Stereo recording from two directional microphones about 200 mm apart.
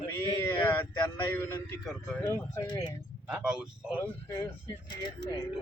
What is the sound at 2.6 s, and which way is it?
Speech, 20° left (ahead or behind).